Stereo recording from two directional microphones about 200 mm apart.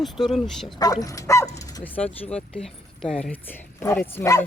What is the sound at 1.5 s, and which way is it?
Bow-wow, 15° left (ahead or behind).